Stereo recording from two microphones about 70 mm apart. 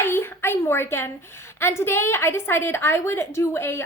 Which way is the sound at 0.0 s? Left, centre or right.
Left.